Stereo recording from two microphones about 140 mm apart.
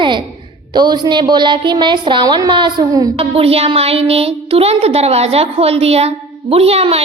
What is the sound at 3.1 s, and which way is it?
Speech, 45° right (ahead or behind).